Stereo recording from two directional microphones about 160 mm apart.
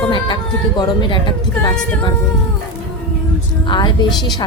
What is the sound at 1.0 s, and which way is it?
Speech, 30° left (ahead or behind).